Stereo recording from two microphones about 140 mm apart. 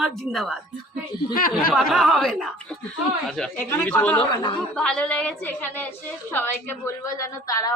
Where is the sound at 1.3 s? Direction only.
90° left.